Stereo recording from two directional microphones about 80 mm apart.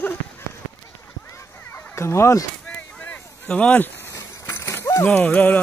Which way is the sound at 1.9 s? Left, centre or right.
Left.